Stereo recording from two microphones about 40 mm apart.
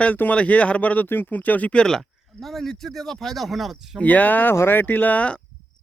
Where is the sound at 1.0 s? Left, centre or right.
Left.